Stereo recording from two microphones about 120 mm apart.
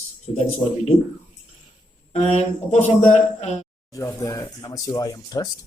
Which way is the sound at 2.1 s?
70° left (ahead or behind).